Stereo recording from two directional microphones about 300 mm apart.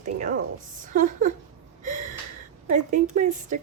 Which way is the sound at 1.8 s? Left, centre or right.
Right.